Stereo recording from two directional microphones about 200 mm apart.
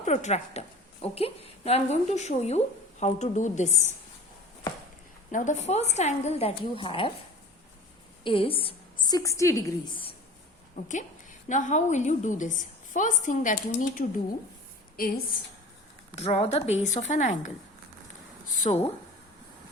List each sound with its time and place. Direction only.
0.0 s a woman's voice: 35° left (ahead or behind)
5.3 s a woman's voice: 40° left (ahead or behind)
8.2 s a woman's voice: 25° left (ahead or behind)
10.8 s a woman's voice: 40° left (ahead or behind)
16.1 s a woman's voice: 30° left (ahead or behind)
18.6 s a woman's voice: 30° left (ahead or behind)